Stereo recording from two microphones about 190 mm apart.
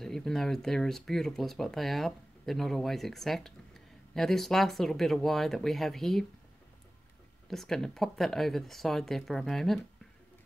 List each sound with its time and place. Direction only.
0.0 s speech: centre (ahead or behind)
7.4 s speech: centre (ahead or behind)